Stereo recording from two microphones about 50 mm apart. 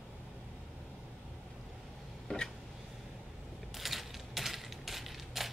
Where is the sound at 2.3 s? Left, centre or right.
Centre.